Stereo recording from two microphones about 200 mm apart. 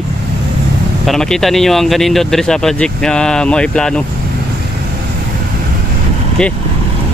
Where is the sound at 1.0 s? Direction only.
Centre (ahead or behind).